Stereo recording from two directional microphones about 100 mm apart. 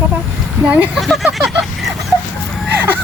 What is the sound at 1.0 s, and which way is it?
Speech, centre (ahead or behind).